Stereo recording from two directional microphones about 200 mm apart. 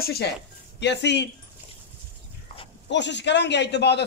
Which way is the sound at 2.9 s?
60° left (ahead or behind).